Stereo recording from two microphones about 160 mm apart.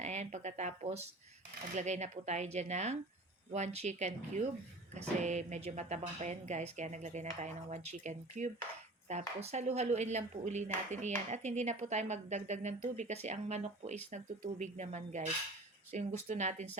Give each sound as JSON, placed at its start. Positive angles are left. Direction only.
{"t": 0.0, "sound": "speech", "side_deg": -45}